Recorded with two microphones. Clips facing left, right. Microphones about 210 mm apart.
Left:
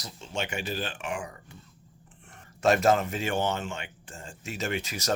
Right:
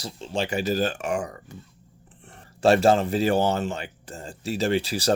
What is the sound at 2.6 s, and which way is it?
Speech, 30° right (ahead or behind).